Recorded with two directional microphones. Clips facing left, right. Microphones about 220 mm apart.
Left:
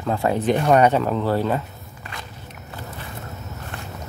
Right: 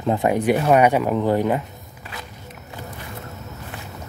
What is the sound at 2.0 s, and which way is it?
Walk, 5° right (ahead or behind).